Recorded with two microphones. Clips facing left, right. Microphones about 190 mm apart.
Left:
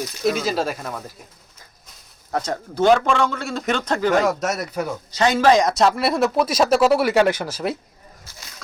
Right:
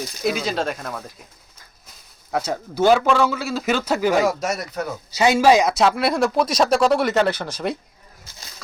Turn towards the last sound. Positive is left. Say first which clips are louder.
# left 1 dB
turn(degrees=5)  # may be behind; listen again after turning